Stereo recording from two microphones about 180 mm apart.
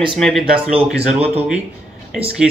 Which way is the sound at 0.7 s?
35° right (ahead or behind).